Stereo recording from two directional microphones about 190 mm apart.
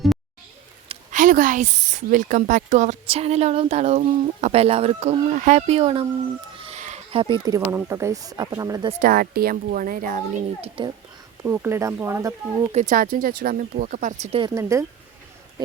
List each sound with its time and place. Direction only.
1.1 s speech: 45° right (ahead or behind); by 8.9 s 20° right (ahead or behind)
9.0 s speech: 50° right (ahead or behind)
10.6 s a child's voice: 25° right (ahead or behind)
11.4 s speech: 10° right (ahead or behind)
12.7 s speech: 45° right (ahead or behind)
14.3 s speech: 20° right (ahead or behind)